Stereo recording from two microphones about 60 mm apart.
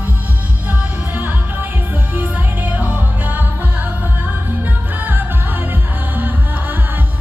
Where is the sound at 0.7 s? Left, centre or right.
Right.